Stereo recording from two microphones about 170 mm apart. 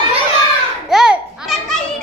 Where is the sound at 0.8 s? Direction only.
5° right (ahead or behind).